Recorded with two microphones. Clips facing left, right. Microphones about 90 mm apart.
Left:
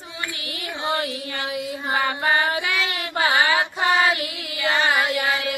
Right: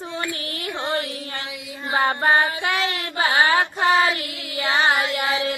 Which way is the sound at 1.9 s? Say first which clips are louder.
Right 3 dB; 35° right (ahead or behind).